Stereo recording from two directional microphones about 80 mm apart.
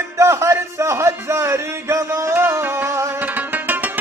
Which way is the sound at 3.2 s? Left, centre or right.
Right.